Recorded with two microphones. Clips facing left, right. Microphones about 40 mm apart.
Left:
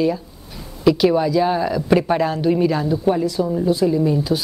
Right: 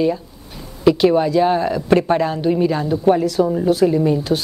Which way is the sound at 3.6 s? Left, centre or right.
Right.